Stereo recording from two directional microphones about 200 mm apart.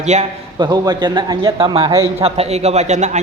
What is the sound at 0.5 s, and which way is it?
A man's voice, 20° right (ahead or behind).